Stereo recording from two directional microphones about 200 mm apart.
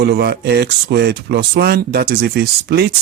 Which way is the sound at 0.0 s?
55° right (ahead or behind).